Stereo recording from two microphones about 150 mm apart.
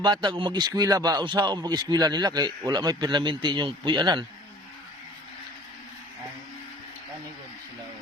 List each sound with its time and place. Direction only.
0.0 s speech: 30° right (ahead or behind)